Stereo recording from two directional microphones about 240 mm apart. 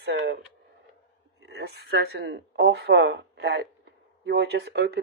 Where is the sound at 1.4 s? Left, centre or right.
Right.